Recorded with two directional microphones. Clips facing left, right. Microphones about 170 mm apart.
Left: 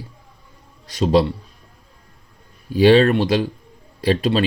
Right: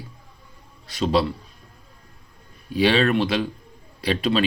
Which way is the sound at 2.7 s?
40° left (ahead or behind).